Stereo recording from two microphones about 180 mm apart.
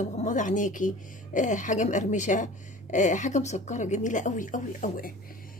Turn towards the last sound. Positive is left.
turn(degrees=50)  # may be behind; listen again after turning